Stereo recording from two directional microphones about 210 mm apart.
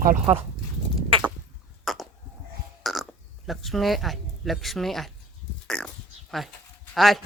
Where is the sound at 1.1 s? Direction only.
25° right (ahead or behind).